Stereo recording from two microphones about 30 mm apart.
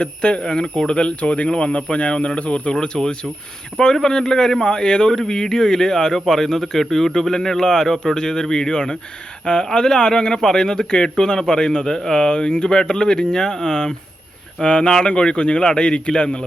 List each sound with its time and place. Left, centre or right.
0.0 s speech: left
0.9 s speech: left
2.7 s a man's voice: left
11.9 s speech: centre
12.2 s a man's voice: left